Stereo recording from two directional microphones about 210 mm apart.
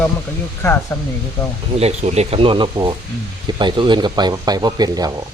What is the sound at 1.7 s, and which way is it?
Speech, 30° right (ahead or behind).